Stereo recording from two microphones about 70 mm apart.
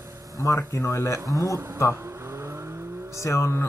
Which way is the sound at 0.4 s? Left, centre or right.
Left.